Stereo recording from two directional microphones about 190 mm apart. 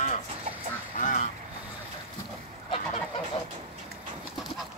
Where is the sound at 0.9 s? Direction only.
45° left (ahead or behind).